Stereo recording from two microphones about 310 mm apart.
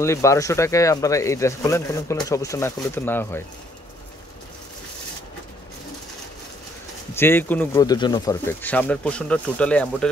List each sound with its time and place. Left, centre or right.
0.0 s speech: centre
7.2 s speech: centre